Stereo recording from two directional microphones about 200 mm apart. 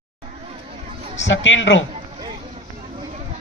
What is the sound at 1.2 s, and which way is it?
Speech, 70° left (ahead or behind).